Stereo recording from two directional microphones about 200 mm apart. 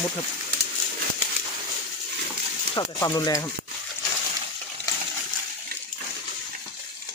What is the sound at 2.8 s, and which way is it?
Speech, 20° left (ahead or behind).